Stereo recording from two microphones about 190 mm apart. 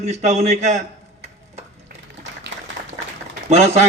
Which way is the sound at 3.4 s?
35° right (ahead or behind).